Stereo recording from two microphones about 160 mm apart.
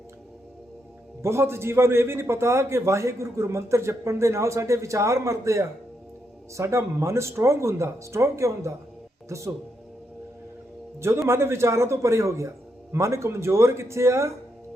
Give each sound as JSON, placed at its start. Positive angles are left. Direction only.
{"t": 1.2, "sound": "a man's voice", "side_deg": -15}
{"t": 11.3, "sound": "a man's voice", "side_deg": -15}